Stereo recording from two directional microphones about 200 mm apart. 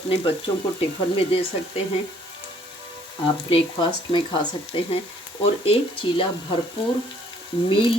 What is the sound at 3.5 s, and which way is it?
Speech, 25° left (ahead or behind).